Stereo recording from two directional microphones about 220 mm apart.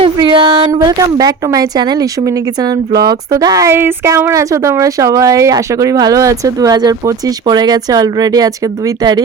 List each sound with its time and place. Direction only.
0.0 s a woman's voice: 20° right (ahead or behind)